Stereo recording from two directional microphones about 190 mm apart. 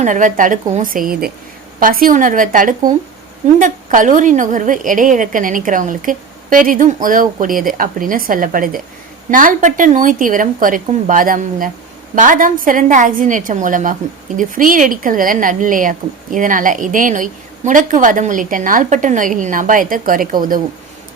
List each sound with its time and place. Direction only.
0.0 s a woman's voice: 40° right (ahead or behind)